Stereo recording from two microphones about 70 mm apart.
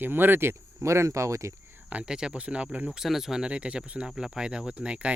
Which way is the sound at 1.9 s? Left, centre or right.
Centre.